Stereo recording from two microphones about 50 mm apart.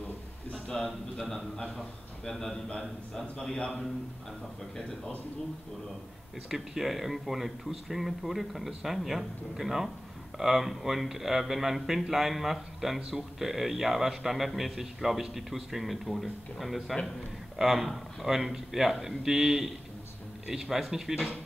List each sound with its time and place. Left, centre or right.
0.5 s a sound: centre
0.8 s a man's voice: centre
6.5 s speech: centre
20.7 s speech: centre